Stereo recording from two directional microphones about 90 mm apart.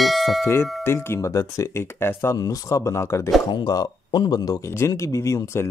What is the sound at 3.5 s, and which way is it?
Speech, 50° left (ahead or behind).